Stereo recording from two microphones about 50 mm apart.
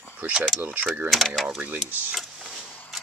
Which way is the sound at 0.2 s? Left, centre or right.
Right.